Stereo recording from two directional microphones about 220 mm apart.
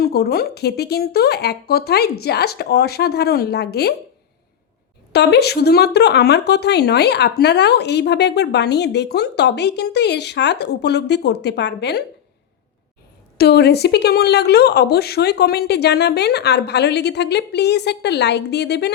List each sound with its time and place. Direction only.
0.0 s speech: 45° left (ahead or behind)
5.1 s speech: 50° left (ahead or behind)
13.3 s speech: 45° left (ahead or behind)